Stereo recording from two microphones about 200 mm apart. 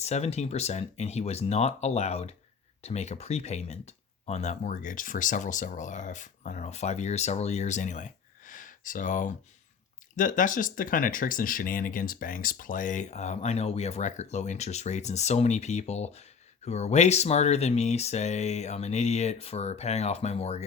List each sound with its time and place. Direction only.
0.0 s speech: 35° left (ahead or behind)